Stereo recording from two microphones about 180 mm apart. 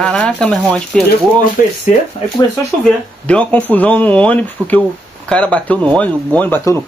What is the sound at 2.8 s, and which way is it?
Speech, 5° left (ahead or behind).